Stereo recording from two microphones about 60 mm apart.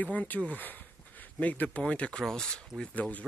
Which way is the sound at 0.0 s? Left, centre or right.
Left.